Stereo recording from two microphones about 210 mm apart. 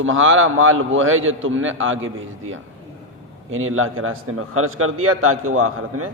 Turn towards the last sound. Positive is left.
turn(degrees=-85)